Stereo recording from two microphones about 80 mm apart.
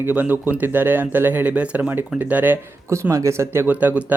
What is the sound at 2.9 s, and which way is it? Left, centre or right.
Speech, right.